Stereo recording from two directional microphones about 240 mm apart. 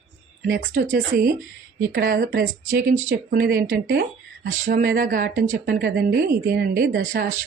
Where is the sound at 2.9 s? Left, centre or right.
Right.